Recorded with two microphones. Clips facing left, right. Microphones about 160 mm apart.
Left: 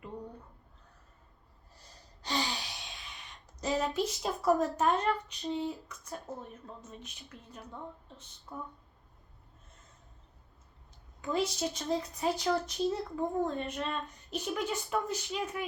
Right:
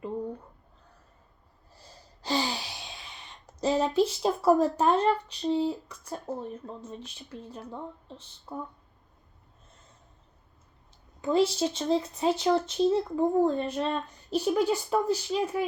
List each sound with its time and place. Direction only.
2.2 s gasp: 30° right (ahead or behind)
3.6 s speech: 30° right (ahead or behind)
11.2 s speech: 30° right (ahead or behind)